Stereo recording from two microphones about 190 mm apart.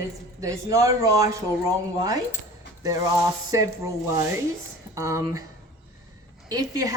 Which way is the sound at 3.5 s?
15° right (ahead or behind).